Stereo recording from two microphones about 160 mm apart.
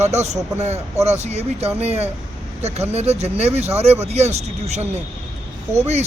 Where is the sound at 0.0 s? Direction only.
45° right (ahead or behind).